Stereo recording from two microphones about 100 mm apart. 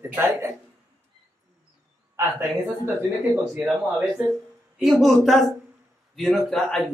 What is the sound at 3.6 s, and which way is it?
Speech, 5° right (ahead or behind).